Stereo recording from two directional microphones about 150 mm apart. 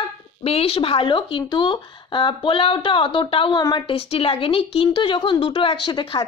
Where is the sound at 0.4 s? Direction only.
40° left (ahead or behind).